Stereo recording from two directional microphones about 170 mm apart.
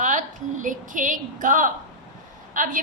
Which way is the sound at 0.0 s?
50° right (ahead or behind).